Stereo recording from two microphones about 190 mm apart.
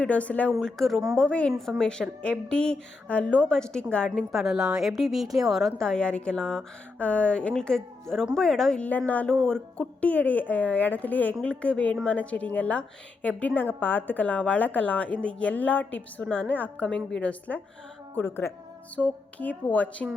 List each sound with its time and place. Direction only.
0.0 s a woman's voice: 5° left (ahead or behind)